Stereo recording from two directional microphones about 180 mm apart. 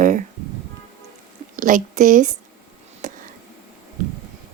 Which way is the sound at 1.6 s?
45° right (ahead or behind).